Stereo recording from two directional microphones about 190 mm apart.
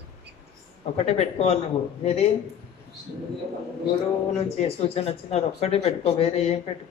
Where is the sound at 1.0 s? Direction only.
35° left (ahead or behind).